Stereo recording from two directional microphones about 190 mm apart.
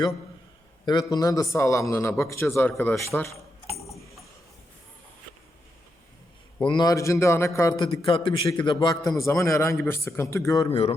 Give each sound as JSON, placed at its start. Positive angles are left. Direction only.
{"t": 0.9, "sound": "a man's voice", "side_deg": 20}
{"t": 6.7, "sound": "a man's voice", "side_deg": 20}
{"t": 10.7, "sound": "speech", "side_deg": 30}